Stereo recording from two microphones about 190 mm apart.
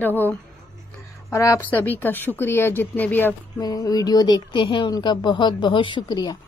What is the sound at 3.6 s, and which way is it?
Speech, 20° left (ahead or behind).